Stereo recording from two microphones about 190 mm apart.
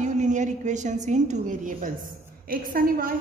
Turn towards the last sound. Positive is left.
turn(degrees=-50)  # may be behind; listen again after turning